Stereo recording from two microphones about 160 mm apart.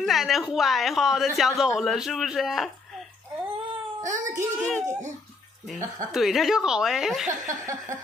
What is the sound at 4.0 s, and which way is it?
Speech, 50° right (ahead or behind).